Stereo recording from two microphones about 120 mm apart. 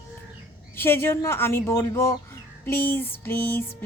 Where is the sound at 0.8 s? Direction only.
20° left (ahead or behind).